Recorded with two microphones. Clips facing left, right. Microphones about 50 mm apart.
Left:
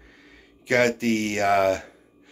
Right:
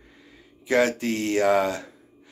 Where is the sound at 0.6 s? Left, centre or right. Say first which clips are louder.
Left 1 dB; left.